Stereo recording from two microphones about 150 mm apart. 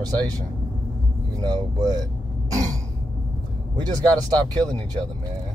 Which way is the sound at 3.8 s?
25° right (ahead or behind).